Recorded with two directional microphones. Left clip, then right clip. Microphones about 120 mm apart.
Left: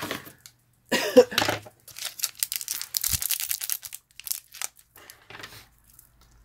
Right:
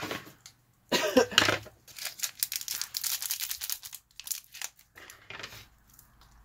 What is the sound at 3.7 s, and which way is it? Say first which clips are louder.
Tearing: left 3 dB; 50° left (ahead or behind).